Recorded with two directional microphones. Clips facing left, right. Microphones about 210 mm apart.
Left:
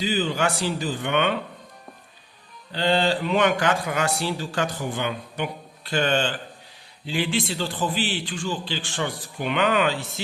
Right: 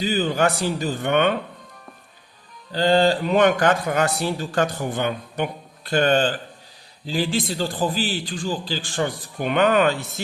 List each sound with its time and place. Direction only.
0.0 s a man's voice: 45° right (ahead or behind)
2.7 s speech: 40° right (ahead or behind)